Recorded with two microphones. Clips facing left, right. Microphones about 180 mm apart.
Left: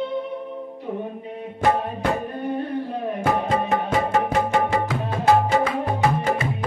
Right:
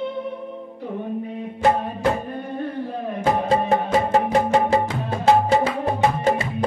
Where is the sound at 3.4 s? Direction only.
35° right (ahead or behind).